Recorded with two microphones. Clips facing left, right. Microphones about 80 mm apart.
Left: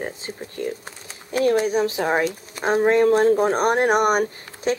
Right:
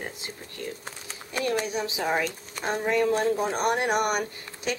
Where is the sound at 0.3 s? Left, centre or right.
Left.